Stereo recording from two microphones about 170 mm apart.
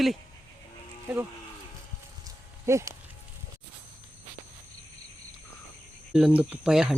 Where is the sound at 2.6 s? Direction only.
15° right (ahead or behind).